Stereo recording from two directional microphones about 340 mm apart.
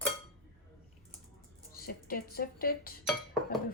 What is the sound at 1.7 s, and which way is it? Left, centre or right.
Speech, left.